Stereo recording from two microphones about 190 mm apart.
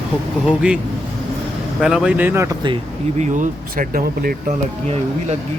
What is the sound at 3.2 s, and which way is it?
Speech, 45° right (ahead or behind).